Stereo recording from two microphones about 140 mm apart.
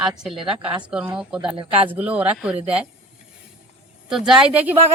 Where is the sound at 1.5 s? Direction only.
40° right (ahead or behind).